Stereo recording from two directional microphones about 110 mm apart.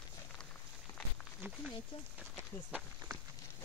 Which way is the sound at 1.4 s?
20° right (ahead or behind).